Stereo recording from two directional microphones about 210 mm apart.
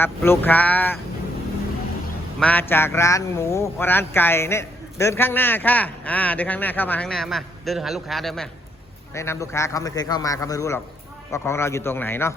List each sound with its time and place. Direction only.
0.0 s speech: 10° left (ahead or behind)
2.4 s speech: 10° left (ahead or behind)
9.1 s speech: 15° left (ahead or behind)